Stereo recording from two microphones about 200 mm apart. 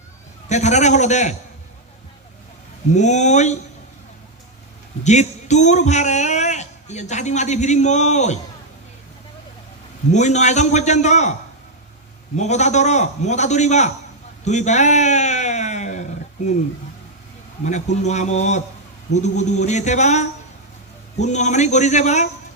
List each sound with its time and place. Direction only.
0.4 s a man's voice: 35° left (ahead or behind)
2.9 s a man's voice: 35° left (ahead or behind)
5.0 s a man's voice: 35° left (ahead or behind)
10.1 s a man's voice: 35° left (ahead or behind)
12.4 s a man's voice: 35° left (ahead or behind)
14.4 s a sound: 35° left (ahead or behind)
16.4 s a man's voice: 35° left (ahead or behind)
17.7 s a man's voice: 35° left (ahead or behind)